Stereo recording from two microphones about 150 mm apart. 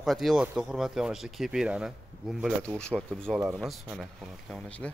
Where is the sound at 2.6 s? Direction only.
5° left (ahead or behind).